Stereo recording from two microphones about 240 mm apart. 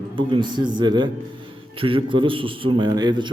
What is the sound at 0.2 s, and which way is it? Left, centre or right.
A man's voice, centre.